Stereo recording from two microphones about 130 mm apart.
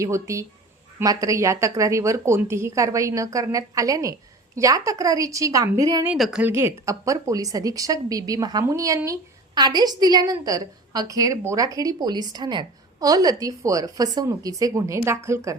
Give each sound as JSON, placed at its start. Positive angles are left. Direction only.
{"t": 0.0, "sound": "a woman's voice", "side_deg": -25}
{"t": 6.1, "sound": "speech", "side_deg": 0}
{"t": 6.4, "sound": "a woman's voice", "side_deg": -20}